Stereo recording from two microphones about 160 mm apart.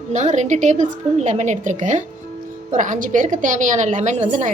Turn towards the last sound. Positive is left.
turn(degrees=-50)  # may be behind; listen again after turning